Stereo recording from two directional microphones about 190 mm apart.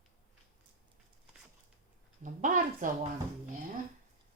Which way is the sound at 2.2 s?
45° right (ahead or behind).